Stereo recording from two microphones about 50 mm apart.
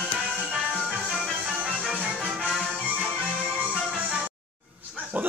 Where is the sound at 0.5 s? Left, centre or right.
Centre.